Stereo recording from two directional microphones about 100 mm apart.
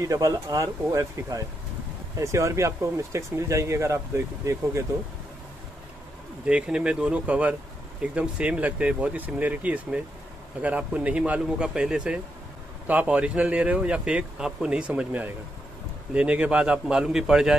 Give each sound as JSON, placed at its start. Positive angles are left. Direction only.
{"t": 0.0, "sound": "speech", "side_deg": -35}
{"t": 6.4, "sound": "a man's voice", "side_deg": -10}